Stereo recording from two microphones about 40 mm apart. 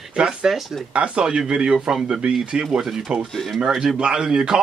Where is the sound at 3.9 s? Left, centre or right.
Right.